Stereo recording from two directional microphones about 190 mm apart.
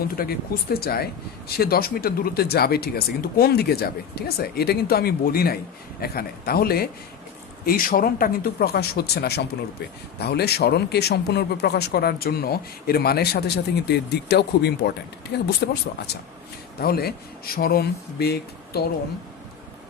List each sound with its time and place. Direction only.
0.2 s speech: 55° left (ahead or behind)